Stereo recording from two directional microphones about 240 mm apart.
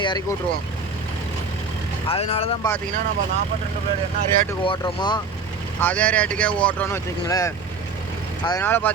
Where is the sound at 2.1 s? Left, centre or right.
Left.